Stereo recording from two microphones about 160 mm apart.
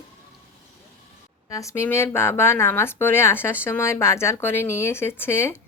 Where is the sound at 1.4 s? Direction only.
20° left (ahead or behind).